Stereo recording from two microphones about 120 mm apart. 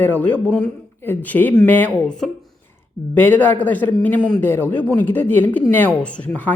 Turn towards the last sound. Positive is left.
turn(degrees=15)  # may be behind; listen again after turning